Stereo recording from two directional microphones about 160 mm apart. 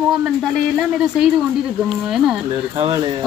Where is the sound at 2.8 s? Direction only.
30° right (ahead or behind).